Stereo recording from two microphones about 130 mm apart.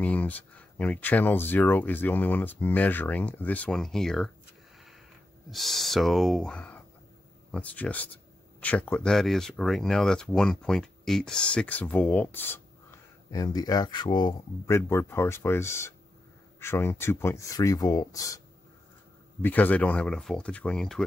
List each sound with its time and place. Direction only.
0.0 s speech: 10° left (ahead or behind)
5.5 s speech: centre (ahead or behind)
13.3 s speech: 30° left (ahead or behind)
14.7 s speech: 20° left (ahead or behind)
19.4 s speech: 15° left (ahead or behind)